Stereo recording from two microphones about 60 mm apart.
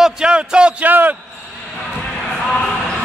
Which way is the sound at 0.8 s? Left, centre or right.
Right.